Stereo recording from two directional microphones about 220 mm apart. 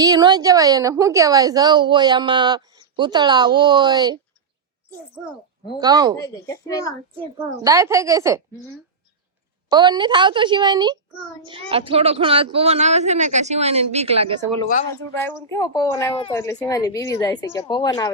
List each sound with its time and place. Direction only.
0.0 s a woman's voice: 20° right (ahead or behind)
5.8 s a woman's voice: 15° right (ahead or behind)
6.2 s speech: 15° left (ahead or behind)
7.3 s a woman's voice: 15° right (ahead or behind)
9.6 s a woman's voice: 20° right (ahead or behind)
15.2 s speech: 10° left (ahead or behind)